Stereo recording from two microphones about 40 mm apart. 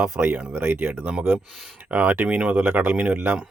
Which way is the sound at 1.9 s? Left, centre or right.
Right.